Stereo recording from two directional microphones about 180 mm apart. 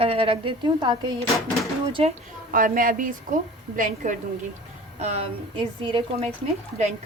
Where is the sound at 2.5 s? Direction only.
50° right (ahead or behind); by 6.3 s 30° right (ahead or behind).